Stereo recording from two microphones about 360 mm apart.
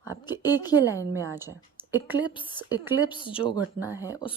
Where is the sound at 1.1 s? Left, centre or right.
Centre.